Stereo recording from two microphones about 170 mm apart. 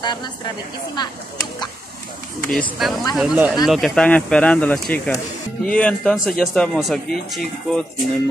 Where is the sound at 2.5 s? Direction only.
Centre (ahead or behind).